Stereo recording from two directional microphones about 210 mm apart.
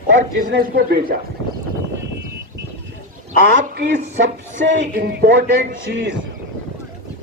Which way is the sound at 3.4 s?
50° right (ahead or behind).